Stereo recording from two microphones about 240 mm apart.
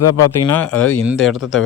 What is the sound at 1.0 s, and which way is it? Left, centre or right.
Speech, centre.